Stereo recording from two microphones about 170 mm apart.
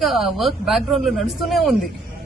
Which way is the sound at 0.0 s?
Centre (ahead or behind).